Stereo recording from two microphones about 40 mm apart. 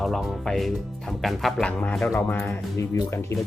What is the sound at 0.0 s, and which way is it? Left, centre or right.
Speech, centre.